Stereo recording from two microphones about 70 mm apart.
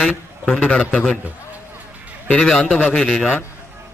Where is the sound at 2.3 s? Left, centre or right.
Centre.